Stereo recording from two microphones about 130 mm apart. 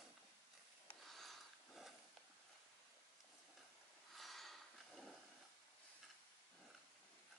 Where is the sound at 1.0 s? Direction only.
Centre (ahead or behind).